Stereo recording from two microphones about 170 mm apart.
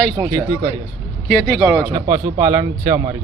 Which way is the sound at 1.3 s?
5° left (ahead or behind).